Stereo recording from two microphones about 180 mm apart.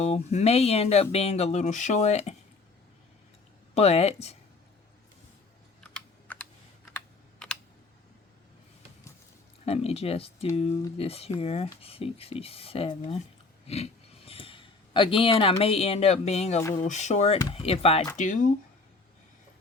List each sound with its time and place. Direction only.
0.0 s speech: 40° left (ahead or behind)
3.8 s speech: 35° left (ahead or behind)
5.8 s computer keyboard: 5° left (ahead or behind)
9.6 s speech: 35° left (ahead or behind)
16.6 s speech: 15° left (ahead or behind)
16.8 s speech: 40° left (ahead or behind)
18.2 s speech: 45° left (ahead or behind)